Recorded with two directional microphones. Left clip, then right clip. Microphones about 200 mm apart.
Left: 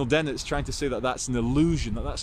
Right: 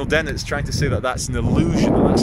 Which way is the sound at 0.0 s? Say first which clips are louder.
Right 5 dB; 10° left (ahead or behind).